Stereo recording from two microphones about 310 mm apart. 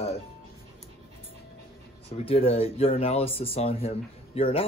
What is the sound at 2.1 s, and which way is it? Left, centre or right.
Speech, centre.